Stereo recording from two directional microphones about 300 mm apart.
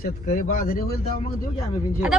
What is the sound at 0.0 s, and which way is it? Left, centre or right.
Speech, left.